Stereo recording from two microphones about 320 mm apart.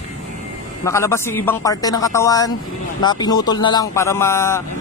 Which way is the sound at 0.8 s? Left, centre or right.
Centre.